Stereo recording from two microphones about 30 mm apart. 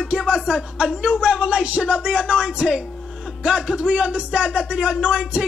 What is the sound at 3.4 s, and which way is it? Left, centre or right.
Speech, right.